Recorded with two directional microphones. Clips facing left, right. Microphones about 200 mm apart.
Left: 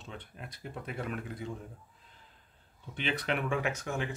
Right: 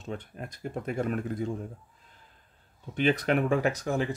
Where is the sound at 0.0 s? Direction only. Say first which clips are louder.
Right 8 dB; 45° right (ahead or behind).